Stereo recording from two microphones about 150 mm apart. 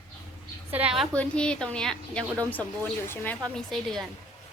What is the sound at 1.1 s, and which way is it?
A woman's voice, 10° left (ahead or behind).